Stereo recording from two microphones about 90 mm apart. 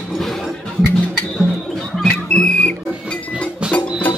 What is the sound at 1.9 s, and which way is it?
Music, 10° left (ahead or behind).